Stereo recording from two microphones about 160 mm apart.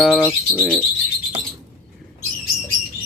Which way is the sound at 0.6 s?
Centre (ahead or behind).